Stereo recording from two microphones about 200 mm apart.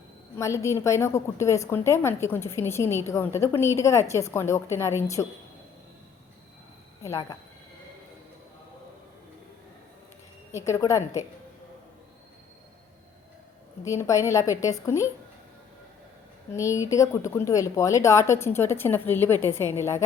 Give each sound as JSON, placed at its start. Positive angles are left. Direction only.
{"t": 0.3, "sound": "a woman's voice", "side_deg": 15}
{"t": 7.0, "sound": "a woman's voice", "side_deg": 15}
{"t": 10.5, "sound": "a woman's voice", "side_deg": 15}
{"t": 13.8, "sound": "a woman's voice", "side_deg": 15}
{"t": 16.5, "sound": "a woman's voice", "side_deg": 15}